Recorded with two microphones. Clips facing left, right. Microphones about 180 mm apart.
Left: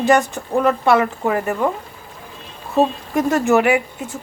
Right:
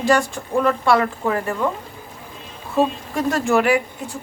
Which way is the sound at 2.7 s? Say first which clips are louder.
Left 3 dB; 20° left (ahead or behind).